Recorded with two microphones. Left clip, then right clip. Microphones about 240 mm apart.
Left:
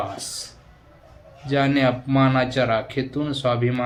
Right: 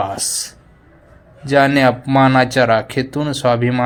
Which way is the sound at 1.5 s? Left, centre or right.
Right.